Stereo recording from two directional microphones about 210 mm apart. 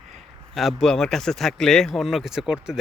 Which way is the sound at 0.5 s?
Centre (ahead or behind).